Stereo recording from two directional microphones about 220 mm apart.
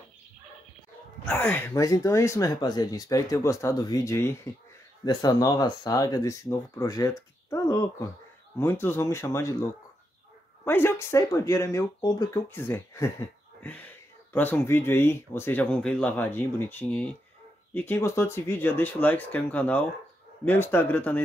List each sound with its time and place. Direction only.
1.2 s speech: 5° left (ahead or behind)